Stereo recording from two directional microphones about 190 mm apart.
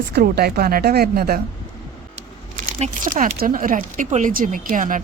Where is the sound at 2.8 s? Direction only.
45° right (ahead or behind).